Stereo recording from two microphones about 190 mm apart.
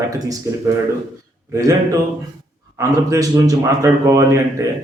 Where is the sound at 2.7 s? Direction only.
15° right (ahead or behind).